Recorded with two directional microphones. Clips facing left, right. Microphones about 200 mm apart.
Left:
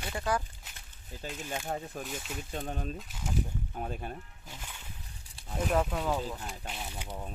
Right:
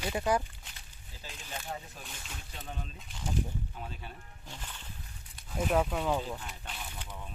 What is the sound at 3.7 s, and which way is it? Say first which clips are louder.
Speech: left 7 dB; 50° left (ahead or behind).